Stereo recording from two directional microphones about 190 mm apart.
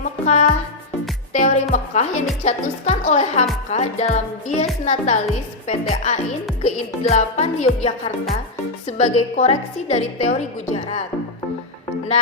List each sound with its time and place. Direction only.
0.3 s speech: 40° left (ahead or behind)
1.3 s music: 40° left (ahead or behind)
1.7 s a woman's voice: 40° left (ahead or behind)